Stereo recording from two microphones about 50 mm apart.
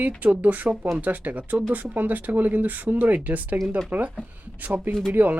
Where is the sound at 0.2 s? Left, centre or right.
Right.